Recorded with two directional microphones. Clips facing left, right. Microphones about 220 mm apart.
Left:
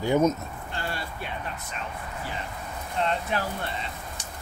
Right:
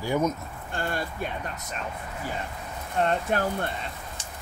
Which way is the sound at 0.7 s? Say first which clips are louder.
Right 5 dB; 50° right (ahead or behind).